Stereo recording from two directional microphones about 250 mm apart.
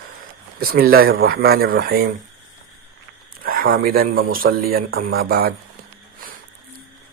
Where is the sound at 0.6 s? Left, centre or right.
Right.